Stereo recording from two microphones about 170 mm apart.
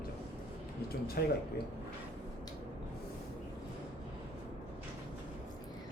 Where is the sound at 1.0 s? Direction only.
65° left (ahead or behind).